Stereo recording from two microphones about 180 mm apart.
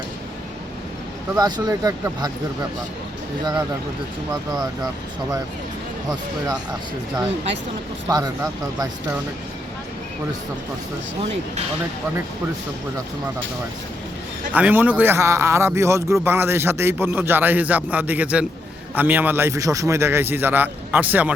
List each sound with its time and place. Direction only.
1.4 s speech: 20° right (ahead or behind)
8.0 s speech: 15° right (ahead or behind)
14.5 s a man's voice: 10° right (ahead or behind)